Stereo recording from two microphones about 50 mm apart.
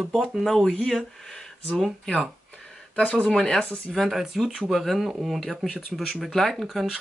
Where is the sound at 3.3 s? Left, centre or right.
Centre.